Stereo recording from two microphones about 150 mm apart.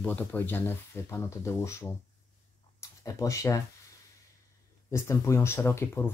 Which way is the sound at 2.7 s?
20° left (ahead or behind).